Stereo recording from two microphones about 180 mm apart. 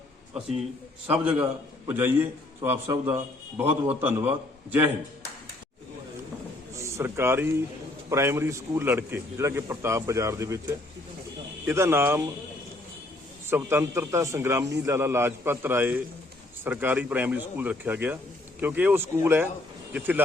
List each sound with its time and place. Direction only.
0.3 s a man's voice: centre (ahead or behind)
6.7 s a sound: 15° right (ahead or behind)
8.1 s a man's voice: 15° right (ahead or behind)
13.5 s a man's voice: 15° right (ahead or behind)